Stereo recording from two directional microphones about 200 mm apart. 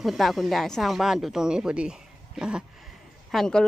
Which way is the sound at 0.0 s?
Centre (ahead or behind).